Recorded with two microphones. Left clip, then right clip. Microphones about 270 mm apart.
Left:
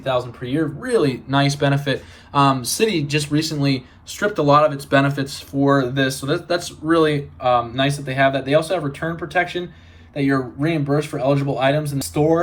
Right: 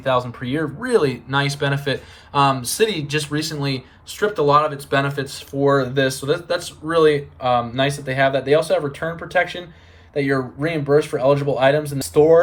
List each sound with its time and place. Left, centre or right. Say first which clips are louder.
0.0 s speech: right 2 dB; centre